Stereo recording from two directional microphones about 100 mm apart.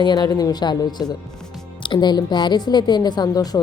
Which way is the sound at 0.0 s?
45° left (ahead or behind).